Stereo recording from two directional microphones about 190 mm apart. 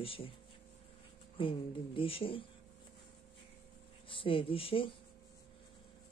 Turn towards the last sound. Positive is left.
turn(degrees=30)  # may be behind; listen again after turning